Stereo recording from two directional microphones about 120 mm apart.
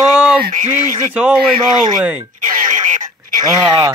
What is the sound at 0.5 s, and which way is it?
Speech, 90° right.